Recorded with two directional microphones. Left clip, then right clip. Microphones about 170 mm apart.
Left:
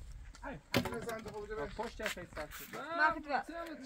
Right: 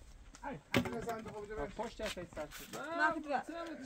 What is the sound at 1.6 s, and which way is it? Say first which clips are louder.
Speech: even; 25° left (ahead or behind).